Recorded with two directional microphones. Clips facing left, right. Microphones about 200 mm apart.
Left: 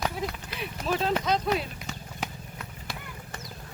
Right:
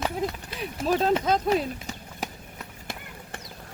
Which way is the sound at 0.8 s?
40° right (ahead or behind).